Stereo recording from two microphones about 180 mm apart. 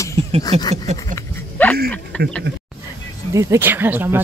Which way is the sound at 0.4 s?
20° left (ahead or behind).